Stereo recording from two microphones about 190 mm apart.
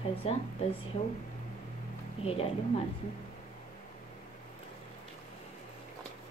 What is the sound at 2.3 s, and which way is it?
Speech, 30° left (ahead or behind).